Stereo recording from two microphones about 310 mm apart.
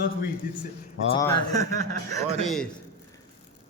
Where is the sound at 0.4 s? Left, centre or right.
Left.